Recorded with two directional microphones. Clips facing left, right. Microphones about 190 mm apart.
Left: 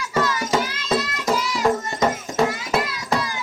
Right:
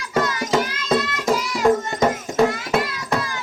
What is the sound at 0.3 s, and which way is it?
Music, centre (ahead or behind).